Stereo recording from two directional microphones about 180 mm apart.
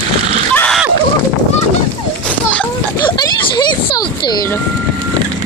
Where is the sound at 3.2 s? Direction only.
25° left (ahead or behind).